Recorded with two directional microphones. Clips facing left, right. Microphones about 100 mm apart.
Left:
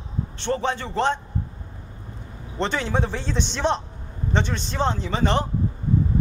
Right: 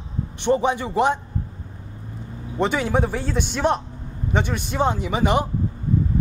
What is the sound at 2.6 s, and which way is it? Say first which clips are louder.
A man's voice: right 3 dB; 10° right (ahead or behind).